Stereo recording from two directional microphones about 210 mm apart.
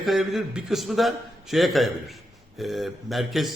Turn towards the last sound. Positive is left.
turn(degrees=0)  # may be behind; listen again after turning